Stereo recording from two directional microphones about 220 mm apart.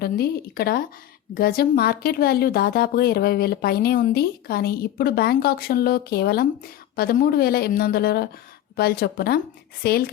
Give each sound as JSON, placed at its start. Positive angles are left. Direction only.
{"t": 0.0, "sound": "a woman's voice", "side_deg": 45}